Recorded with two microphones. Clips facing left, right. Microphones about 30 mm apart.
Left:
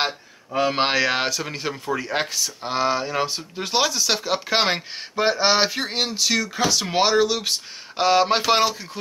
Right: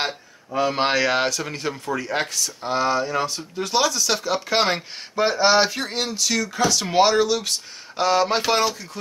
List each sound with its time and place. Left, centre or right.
0.0 s speech: centre